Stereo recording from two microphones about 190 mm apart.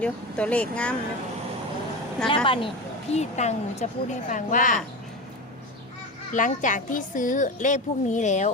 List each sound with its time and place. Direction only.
0.0 s speech: 5° left (ahead or behind)
2.3 s speech: 25° left (ahead or behind); by 4.8 s 45° left (ahead or behind)
6.3 s speech: 40° left (ahead or behind)